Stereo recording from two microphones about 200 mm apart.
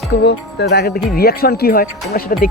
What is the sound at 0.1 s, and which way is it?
Speech, 55° left (ahead or behind).